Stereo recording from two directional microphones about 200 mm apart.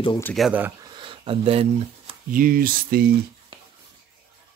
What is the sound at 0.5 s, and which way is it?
Speech, 10° right (ahead or behind).